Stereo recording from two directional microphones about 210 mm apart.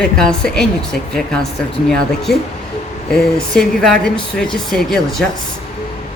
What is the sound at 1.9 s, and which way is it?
Speech, centre (ahead or behind).